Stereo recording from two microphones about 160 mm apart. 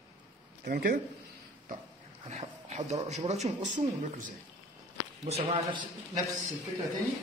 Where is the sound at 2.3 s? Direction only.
45° right (ahead or behind).